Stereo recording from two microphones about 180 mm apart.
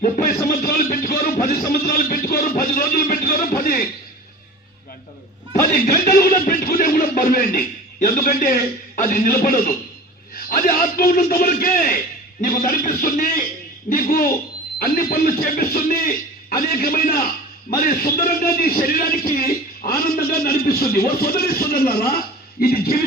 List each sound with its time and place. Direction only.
0.0 s a man's voice: 50° left (ahead or behind)
0.4 s a sound: 55° left (ahead or behind)
5.7 s music: 55° left (ahead or behind)
6.4 s a man's voice: 50° left (ahead or behind)